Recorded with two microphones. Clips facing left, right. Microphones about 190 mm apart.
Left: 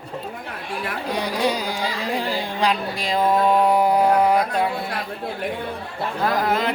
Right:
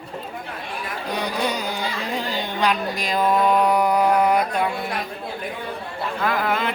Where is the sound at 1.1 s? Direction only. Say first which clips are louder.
Left 2 dB; 30° left (ahead or behind).